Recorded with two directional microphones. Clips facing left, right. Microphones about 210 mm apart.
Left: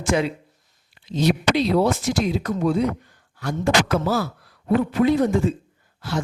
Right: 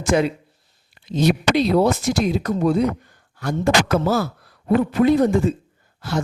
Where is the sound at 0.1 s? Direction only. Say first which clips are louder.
Right 3 dB; 45° right (ahead or behind).